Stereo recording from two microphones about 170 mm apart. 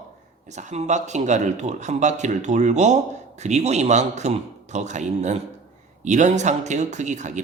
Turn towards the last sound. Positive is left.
turn(degrees=-45)  # may be behind; listen again after turning